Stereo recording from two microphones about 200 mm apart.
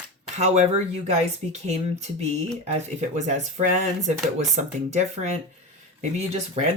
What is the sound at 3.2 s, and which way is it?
Speech, 35° right (ahead or behind).